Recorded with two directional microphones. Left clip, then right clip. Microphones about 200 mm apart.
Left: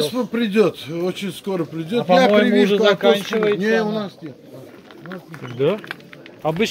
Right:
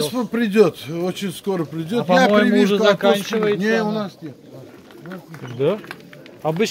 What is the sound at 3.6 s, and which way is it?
Speech, 55° right (ahead or behind).